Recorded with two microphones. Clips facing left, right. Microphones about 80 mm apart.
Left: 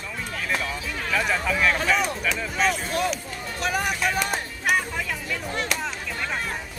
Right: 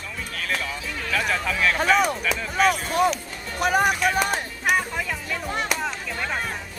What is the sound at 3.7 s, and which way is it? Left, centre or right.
Speech, right.